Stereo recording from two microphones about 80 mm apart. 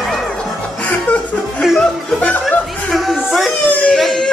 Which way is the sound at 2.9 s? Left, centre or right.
Centre.